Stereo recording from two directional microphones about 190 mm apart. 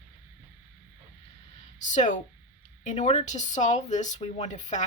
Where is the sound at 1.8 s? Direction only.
40° left (ahead or behind).